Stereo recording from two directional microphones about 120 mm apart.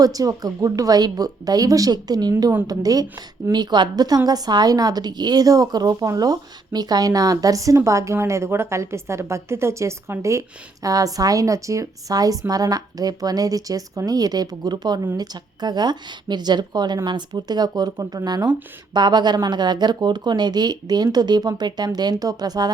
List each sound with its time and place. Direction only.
0.0 s a woman's voice: 30° right (ahead or behind)